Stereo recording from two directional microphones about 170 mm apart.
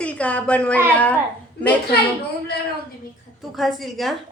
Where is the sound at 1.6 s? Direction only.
70° left (ahead or behind).